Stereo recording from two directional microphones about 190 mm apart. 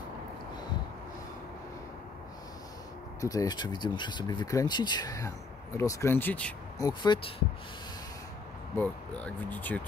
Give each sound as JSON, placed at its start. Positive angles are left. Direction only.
{"t": 3.2, "sound": "speech", "side_deg": 15}
{"t": 6.8, "sound": "speech", "side_deg": 25}
{"t": 8.7, "sound": "speech", "side_deg": 5}